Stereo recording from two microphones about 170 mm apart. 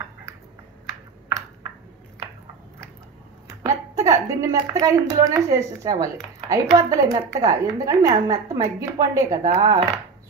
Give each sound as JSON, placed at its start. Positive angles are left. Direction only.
{"t": 3.4, "sound": "a woman's voice", "side_deg": -20}